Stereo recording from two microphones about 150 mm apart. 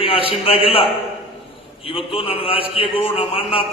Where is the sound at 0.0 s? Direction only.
40° left (ahead or behind).